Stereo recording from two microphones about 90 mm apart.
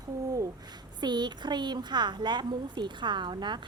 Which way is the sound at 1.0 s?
55° right (ahead or behind).